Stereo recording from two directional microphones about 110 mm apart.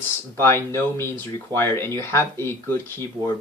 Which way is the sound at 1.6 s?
20° left (ahead or behind).